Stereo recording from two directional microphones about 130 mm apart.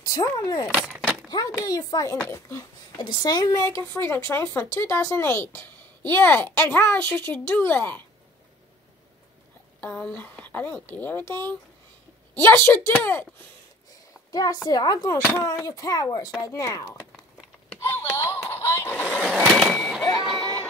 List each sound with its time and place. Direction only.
0.0 s a child's voice: 25° left (ahead or behind)
9.8 s a woman's voice: 15° left (ahead or behind)
12.6 s a woman's voice: 15° left (ahead or behind)
14.3 s a child's voice: 30° left (ahead or behind)
17.8 s a sound: 20° left (ahead or behind)
19.0 s vehicle: 5° left (ahead or behind)
19.6 s a sound: 5° right (ahead or behind)
20.2 s music: 5° left (ahead or behind)